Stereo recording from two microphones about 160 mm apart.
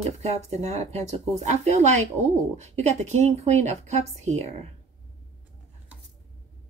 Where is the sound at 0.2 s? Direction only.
40° right (ahead or behind).